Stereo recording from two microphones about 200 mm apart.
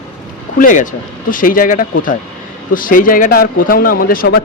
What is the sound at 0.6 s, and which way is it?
Speech, 40° left (ahead or behind).